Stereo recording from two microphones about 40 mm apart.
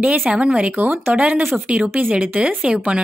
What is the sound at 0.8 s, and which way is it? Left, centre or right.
Speech, right.